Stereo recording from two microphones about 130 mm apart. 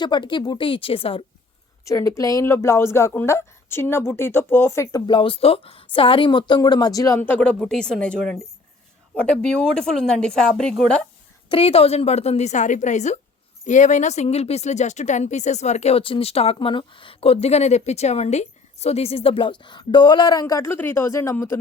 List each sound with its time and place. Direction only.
0.0 s a woman's voice: 35° left (ahead or behind)
1.8 s speech: 25° left (ahead or behind)
5.0 s a woman's voice: 40° left (ahead or behind); by 11.0 s 5° left (ahead or behind)
11.4 s a woman's voice: 45° left (ahead or behind); by 21.6 s 20° left (ahead or behind)